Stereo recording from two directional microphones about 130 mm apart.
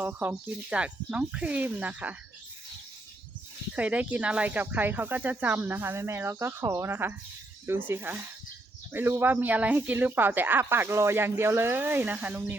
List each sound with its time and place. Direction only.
0.0 s speech: 10° right (ahead or behind)
3.8 s speech: 10° right (ahead or behind)